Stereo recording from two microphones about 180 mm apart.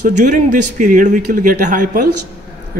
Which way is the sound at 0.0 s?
45° right (ahead or behind).